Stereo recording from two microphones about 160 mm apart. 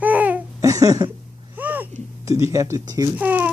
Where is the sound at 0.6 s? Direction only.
20° right (ahead or behind).